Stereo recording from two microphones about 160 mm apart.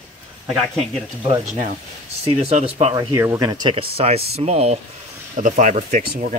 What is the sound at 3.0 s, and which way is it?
Speech, 15° right (ahead or behind).